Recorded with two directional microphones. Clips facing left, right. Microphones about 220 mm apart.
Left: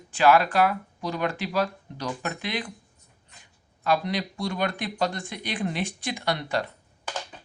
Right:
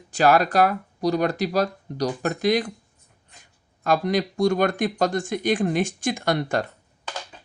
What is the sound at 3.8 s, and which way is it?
Speech, 45° right (ahead or behind).